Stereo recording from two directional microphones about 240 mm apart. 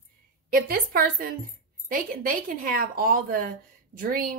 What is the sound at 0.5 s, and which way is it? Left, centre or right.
A woman's voice, right.